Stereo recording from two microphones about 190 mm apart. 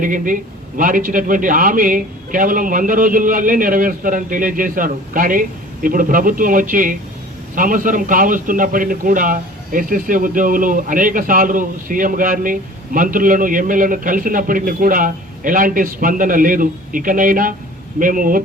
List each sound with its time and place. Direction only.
0.0 s a man's voice: 45° right (ahead or behind)